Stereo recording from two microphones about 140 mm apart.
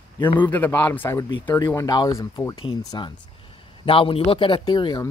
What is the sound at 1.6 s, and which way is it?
Speech, 30° left (ahead or behind).